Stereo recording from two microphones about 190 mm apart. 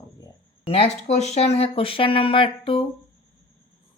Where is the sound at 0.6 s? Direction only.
30° left (ahead or behind).